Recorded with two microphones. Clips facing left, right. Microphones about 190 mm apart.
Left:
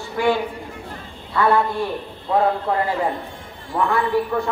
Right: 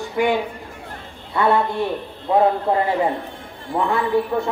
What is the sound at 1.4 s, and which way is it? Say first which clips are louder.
Speech: even; 25° right (ahead or behind).